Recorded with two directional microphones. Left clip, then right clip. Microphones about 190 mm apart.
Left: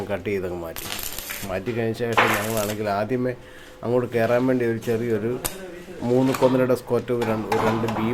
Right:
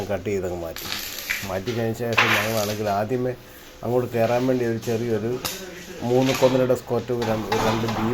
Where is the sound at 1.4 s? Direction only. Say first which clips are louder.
Left 5 dB; 20° left (ahead or behind).